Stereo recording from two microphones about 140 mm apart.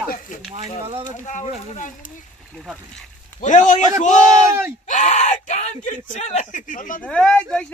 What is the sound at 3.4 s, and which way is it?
Speech, 60° left (ahead or behind).